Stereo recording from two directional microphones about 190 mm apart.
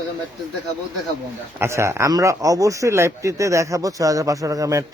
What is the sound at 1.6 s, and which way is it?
Speech, 15° right (ahead or behind).